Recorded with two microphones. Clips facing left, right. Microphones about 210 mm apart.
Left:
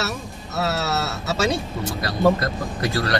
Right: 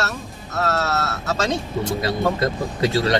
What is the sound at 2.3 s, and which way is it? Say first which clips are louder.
Speech: right 4 dB; 25° right (ahead or behind).